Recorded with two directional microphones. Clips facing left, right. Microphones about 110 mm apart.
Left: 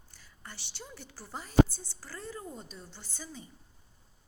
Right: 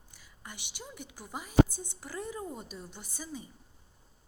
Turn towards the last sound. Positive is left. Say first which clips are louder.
# right 4 dB
turn(degrees=-10)  # may be behind; listen again after turning